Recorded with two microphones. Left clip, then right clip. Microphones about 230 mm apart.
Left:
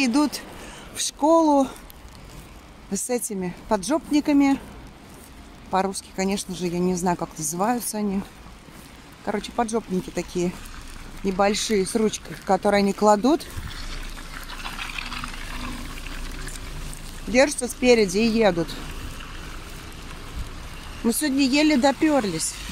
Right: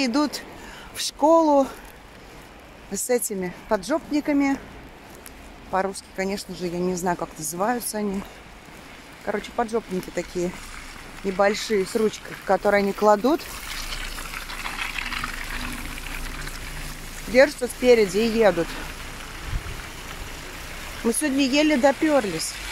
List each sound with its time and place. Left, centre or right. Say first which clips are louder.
0.0 s speech: left 1 dB; centre
2.9 s speech: right 3 dB; centre
5.7 s speech: left 1 dB; centre
9.2 s speech: even; centre
14.5 s boiling: right 2 dB; centre
17.3 s speech: right 2 dB; centre
21.1 s speech: even; centre